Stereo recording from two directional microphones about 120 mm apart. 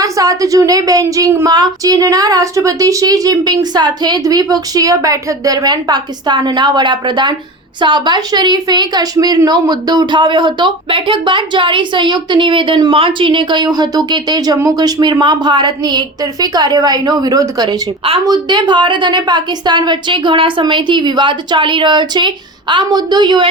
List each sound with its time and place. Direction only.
0.0 s a woman's voice: 30° right (ahead or behind)
1.5 s a woman's voice: 35° right (ahead or behind)